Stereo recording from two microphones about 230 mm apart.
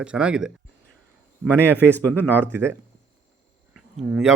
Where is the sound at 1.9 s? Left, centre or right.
Centre.